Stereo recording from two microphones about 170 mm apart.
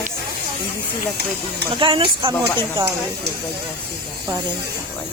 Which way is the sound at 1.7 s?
30° right (ahead or behind).